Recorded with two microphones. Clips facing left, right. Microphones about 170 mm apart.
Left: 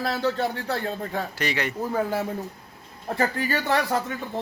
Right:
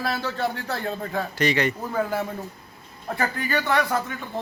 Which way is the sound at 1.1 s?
5° left (ahead or behind).